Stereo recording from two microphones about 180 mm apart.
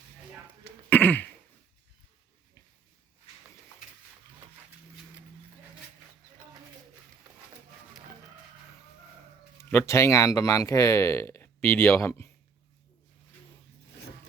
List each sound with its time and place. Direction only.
0.9 s throat clearing: 10° left (ahead or behind)
9.6 s speech: 15° left (ahead or behind)